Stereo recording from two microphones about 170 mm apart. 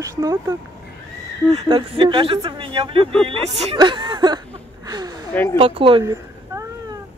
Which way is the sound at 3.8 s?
25° right (ahead or behind).